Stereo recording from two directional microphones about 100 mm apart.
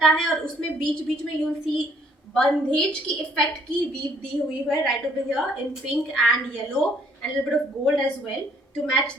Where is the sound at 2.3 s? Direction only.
10° left (ahead or behind).